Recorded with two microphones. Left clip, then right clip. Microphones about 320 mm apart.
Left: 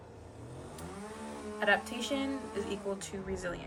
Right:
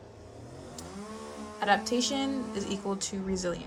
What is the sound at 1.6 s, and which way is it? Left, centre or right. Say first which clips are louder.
A woman's voice: right 4 dB; centre.